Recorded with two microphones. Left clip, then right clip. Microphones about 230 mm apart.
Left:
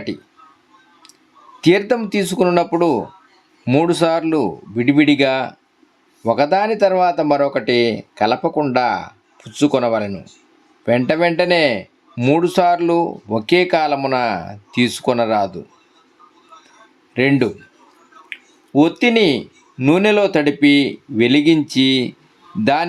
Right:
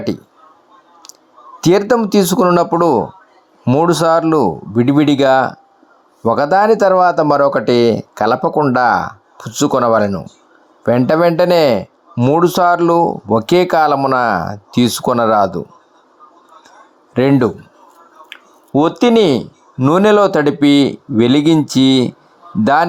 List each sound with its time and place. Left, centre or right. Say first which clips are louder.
1.6 s speech: right 3 dB; right
17.2 s speech: right 3 dB; right
18.3 s a sound: right 6 dB; centre
19.8 s speech: right 4 dB; right